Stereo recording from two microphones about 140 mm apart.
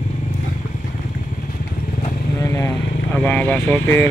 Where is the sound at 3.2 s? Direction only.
10° left (ahead or behind).